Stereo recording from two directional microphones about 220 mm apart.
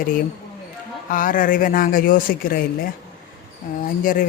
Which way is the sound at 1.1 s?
40° left (ahead or behind).